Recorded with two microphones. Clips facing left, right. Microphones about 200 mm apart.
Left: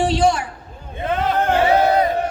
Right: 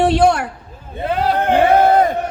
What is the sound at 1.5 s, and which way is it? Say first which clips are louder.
Speech: right 4 dB; 55° right (ahead or behind).